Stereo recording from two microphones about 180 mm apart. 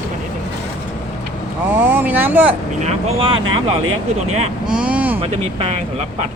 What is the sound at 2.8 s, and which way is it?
Speech, 35° right (ahead or behind).